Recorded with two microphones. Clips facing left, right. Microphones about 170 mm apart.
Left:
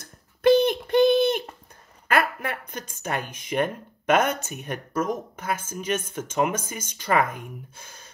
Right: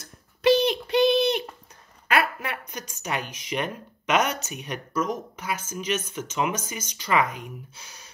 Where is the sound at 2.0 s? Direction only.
50° left (ahead or behind).